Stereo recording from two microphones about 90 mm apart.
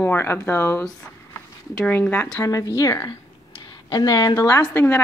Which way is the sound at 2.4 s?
40° left (ahead or behind).